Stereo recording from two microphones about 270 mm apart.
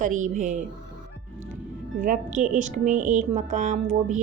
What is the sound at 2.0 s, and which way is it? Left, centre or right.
Speech, right.